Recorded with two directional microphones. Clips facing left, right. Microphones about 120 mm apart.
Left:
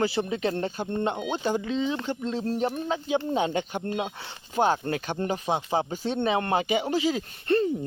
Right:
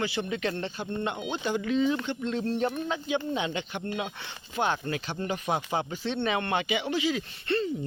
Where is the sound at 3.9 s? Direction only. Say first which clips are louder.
Left 3 dB; 30° left (ahead or behind).